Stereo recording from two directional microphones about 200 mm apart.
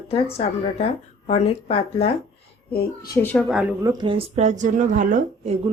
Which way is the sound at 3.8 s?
20° right (ahead or behind).